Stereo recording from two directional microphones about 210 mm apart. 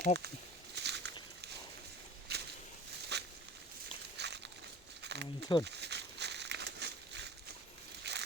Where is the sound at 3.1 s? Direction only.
55° right (ahead or behind).